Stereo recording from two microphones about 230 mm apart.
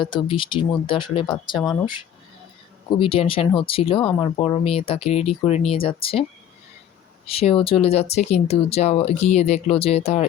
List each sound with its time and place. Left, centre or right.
0.0 s speech: left
7.3 s speech: left